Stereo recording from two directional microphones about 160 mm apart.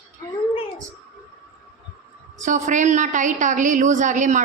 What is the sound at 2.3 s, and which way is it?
A woman's voice, 50° right (ahead or behind).